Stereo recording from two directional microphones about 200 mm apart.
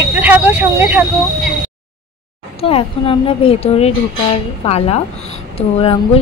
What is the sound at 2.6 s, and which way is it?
A woman's voice, 30° left (ahead or behind).